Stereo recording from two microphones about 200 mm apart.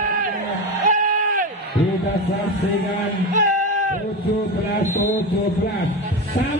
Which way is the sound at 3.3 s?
40° right (ahead or behind).